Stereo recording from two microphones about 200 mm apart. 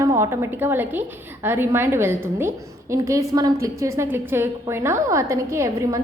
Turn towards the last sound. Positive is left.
turn(degrees=-15)  # may be behind; listen again after turning